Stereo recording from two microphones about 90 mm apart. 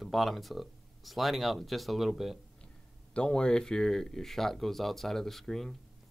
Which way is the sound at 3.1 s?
10° left (ahead or behind).